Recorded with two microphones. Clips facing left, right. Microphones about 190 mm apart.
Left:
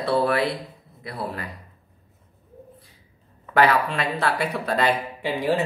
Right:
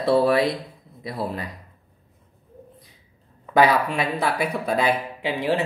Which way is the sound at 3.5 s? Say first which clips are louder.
Right 1 dB; 15° right (ahead or behind).